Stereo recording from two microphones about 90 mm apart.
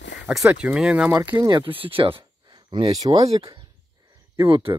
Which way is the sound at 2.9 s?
45° right (ahead or behind).